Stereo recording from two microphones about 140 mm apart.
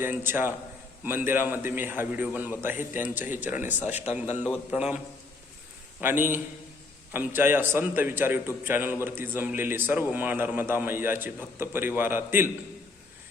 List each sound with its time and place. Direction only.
0.0 s a man's voice: 15° right (ahead or behind)
6.0 s a man's voice: 15° right (ahead or behind)